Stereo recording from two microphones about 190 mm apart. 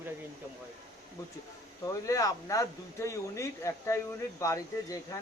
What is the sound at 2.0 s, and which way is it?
Speech, 15° left (ahead or behind).